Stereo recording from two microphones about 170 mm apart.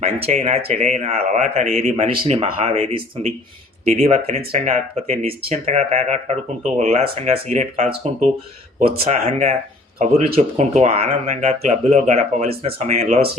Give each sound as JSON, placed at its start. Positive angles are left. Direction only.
{"t": 0.2, "sound": "speech", "side_deg": -40}
{"t": 9.0, "sound": "speech", "side_deg": -40}